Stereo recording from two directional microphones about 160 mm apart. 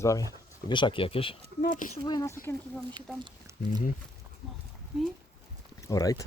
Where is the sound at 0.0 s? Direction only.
20° left (ahead or behind).